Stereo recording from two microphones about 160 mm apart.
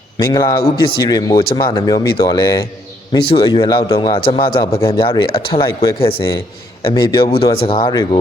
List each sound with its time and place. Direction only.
0.2 s speech: 25° left (ahead or behind)
5.6 s speech: 20° left (ahead or behind)
6.0 s speech: 35° left (ahead or behind)